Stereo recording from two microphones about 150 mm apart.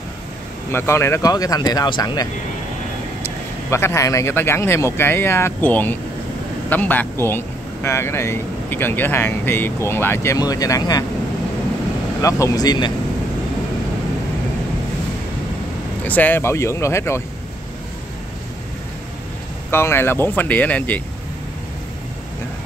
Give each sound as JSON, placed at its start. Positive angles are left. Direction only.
{"t": 0.7, "sound": "speech", "side_deg": 15}
{"t": 3.7, "sound": "speech", "side_deg": 20}
{"t": 12.2, "sound": "speech", "side_deg": 20}
{"t": 16.0, "sound": "speech", "side_deg": 10}
{"t": 19.7, "sound": "speech", "side_deg": 15}